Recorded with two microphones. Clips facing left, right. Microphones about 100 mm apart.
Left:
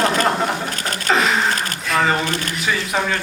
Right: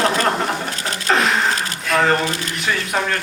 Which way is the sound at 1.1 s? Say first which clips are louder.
Even; centre (ahead or behind).